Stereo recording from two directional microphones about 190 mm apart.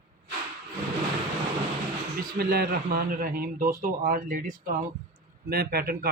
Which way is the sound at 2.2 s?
55° right (ahead or behind).